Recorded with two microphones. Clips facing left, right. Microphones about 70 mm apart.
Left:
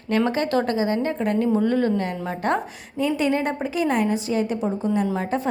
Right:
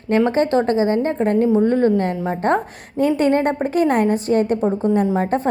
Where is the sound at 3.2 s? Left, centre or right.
Right.